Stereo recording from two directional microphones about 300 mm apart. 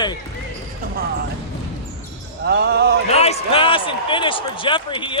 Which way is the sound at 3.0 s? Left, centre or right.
Left.